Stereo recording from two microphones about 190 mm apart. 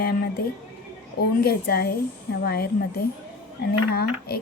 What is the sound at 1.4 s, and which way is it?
Speech, 55° left (ahead or behind).